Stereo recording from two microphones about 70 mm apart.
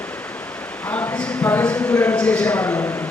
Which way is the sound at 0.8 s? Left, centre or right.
Left.